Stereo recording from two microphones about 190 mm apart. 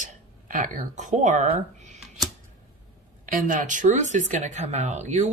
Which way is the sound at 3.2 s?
45° right (ahead or behind).